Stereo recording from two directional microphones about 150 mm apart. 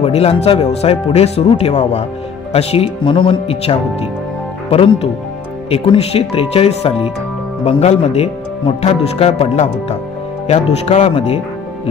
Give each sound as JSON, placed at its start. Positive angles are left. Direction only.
{"t": 0.0, "sound": "speech", "side_deg": 40}